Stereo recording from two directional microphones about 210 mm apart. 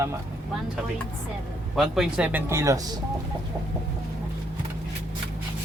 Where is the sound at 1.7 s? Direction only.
Centre (ahead or behind).